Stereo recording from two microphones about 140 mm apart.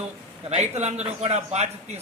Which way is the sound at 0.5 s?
50° right (ahead or behind).